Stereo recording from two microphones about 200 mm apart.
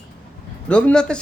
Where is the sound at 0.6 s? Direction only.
5° left (ahead or behind).